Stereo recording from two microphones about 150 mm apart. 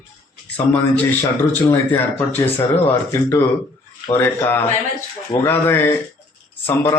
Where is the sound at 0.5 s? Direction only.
10° left (ahead or behind).